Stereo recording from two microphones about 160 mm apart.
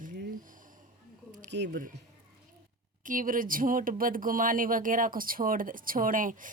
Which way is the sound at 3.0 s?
55° right (ahead or behind).